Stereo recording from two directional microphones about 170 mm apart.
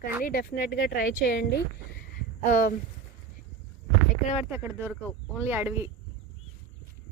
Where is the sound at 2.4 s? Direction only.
55° left (ahead or behind).